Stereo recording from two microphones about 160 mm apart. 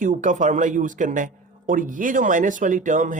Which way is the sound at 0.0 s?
55° right (ahead or behind).